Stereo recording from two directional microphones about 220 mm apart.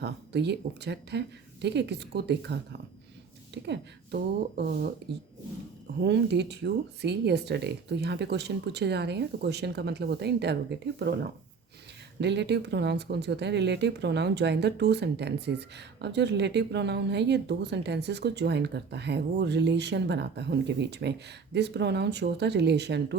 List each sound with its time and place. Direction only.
0.0 s speech: 50° right (ahead or behind)
12.2 s speech: 50° right (ahead or behind)